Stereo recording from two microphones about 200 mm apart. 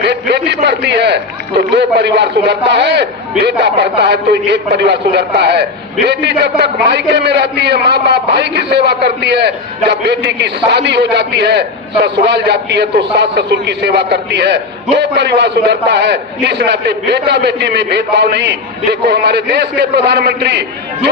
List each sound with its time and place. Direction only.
0.0 s a man's voice: 55° right (ahead or behind)